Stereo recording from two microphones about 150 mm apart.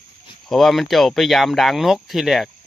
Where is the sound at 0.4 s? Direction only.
Centre (ahead or behind).